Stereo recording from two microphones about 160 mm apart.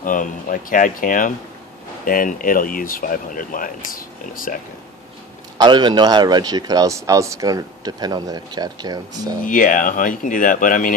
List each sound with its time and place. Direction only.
0.0 s speech: 55° left (ahead or behind)
5.6 s a man's voice: 25° right (ahead or behind)
9.5 s speech: 55° left (ahead or behind)